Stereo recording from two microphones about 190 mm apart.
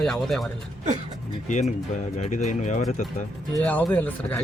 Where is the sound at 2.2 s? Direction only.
40° left (ahead or behind).